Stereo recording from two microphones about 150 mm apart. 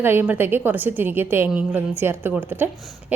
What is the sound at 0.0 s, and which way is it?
A woman's voice, 15° right (ahead or behind).